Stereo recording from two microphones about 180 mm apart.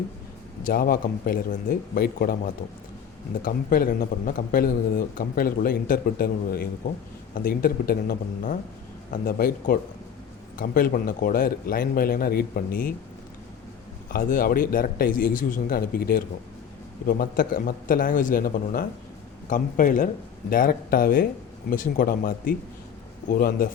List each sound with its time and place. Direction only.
0.6 s a man's voice: 55° left (ahead or behind)
14.1 s speech: 50° left (ahead or behind)